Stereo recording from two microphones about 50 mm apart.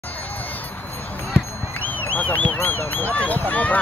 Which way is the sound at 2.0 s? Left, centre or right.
Left.